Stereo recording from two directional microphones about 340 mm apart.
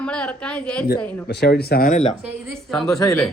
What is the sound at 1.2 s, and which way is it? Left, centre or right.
Speech, left.